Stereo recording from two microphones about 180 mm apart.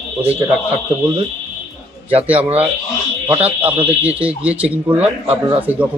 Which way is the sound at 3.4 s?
10° right (ahead or behind).